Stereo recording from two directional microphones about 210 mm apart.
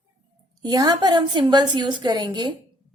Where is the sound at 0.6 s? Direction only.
20° right (ahead or behind).